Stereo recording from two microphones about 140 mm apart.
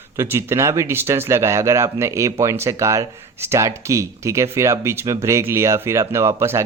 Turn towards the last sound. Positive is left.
turn(degrees=-20)  # may be behind; listen again after turning